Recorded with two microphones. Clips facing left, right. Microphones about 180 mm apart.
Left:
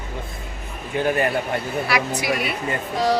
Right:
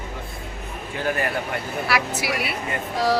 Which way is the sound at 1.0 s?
20° left (ahead or behind).